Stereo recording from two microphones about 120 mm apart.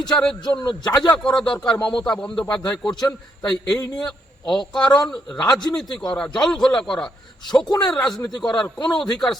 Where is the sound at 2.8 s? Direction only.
40° left (ahead or behind).